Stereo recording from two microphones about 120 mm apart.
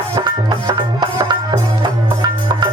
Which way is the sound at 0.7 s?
40° right (ahead or behind).